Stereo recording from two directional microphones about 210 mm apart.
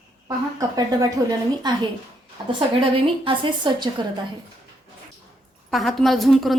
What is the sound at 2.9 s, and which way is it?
A woman's voice, 25° right (ahead or behind).